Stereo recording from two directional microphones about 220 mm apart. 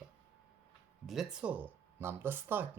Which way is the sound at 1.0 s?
Centre (ahead or behind).